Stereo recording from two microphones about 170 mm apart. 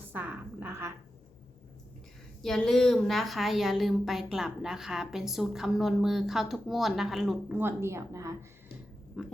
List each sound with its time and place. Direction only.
0.1 s a woman's voice: 10° right (ahead or behind)
2.4 s a woman's voice: 5° left (ahead or behind); by 8.4 s 15° right (ahead or behind)
9.2 s speech: centre (ahead or behind)